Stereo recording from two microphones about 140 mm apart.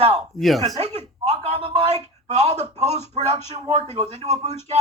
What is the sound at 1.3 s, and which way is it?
Speech, 45° right (ahead or behind).